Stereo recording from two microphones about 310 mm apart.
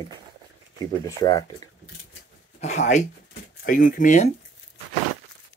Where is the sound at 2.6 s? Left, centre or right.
Left.